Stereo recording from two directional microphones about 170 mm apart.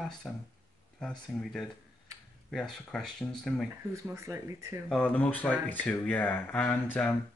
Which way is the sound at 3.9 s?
15° right (ahead or behind).